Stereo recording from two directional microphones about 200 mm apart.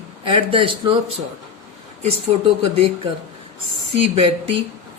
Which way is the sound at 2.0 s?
30° right (ahead or behind).